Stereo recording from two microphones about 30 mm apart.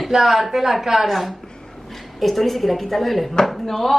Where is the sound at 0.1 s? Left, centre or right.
Centre.